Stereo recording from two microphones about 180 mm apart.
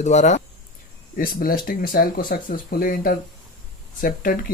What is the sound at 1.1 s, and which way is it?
Speech, 50° left (ahead or behind).